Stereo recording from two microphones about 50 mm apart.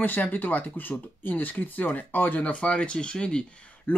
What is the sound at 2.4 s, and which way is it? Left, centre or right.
Speech, left.